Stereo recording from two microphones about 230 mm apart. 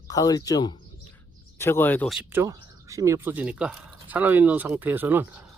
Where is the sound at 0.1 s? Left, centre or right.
Centre.